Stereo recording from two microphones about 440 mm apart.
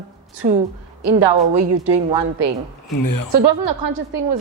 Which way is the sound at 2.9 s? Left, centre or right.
Left.